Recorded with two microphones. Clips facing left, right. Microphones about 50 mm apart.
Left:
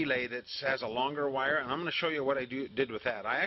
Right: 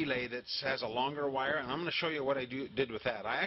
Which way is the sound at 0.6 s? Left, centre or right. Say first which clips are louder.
Left 3 dB; centre.